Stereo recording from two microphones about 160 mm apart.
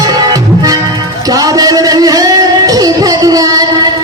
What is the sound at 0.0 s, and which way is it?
Music, 25° right (ahead or behind).